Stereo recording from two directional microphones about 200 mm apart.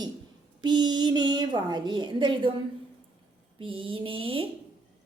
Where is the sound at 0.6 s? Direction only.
20° right (ahead or behind).